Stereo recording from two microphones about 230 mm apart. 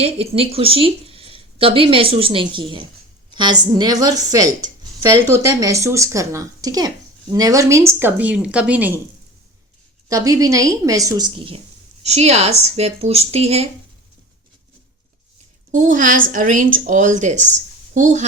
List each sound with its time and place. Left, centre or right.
0.0 s a woman's voice: right; by 9.0 s centre
10.1 s a woman's voice: centre
15.7 s a woman's voice: right